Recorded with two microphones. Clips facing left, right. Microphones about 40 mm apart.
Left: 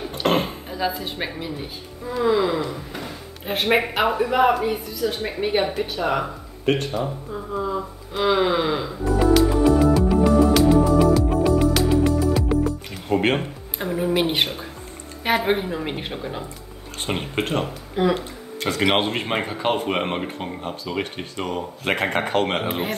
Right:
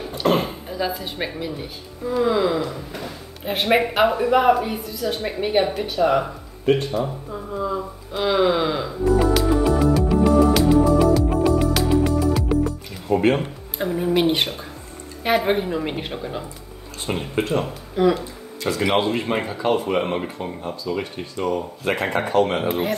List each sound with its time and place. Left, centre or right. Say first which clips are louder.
0.2 s a sound: right 1 dB; left
0.7 s speech: even; centre
6.6 s speech: right 2 dB; left
7.6 s music: right 1 dB; centre
13.1 s speech: right 2 dB; left
13.7 s speech: right 1 dB; centre
17.0 s speech: right 1 dB; left
22.7 s speech: right 3 dB; left